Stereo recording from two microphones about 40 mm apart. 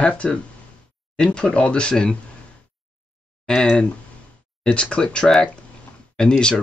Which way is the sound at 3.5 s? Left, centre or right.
Centre.